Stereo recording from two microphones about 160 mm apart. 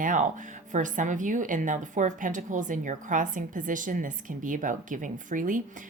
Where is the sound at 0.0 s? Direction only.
55° right (ahead or behind).